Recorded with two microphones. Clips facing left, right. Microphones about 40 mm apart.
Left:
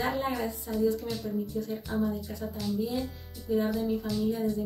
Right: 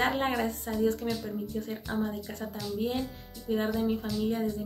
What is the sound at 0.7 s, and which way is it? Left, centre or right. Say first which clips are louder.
Speech: left 4 dB; right.